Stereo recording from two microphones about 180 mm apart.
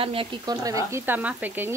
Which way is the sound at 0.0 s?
30° right (ahead or behind).